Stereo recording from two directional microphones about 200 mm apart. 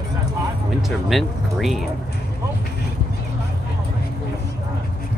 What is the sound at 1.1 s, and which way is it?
Music, centre (ahead or behind).